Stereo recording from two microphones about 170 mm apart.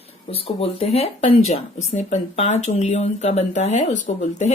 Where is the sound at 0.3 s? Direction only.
35° left (ahead or behind).